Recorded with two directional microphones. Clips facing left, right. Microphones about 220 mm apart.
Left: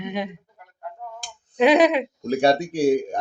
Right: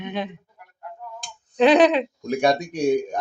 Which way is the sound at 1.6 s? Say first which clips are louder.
Right 1 dB; 10° left (ahead or behind).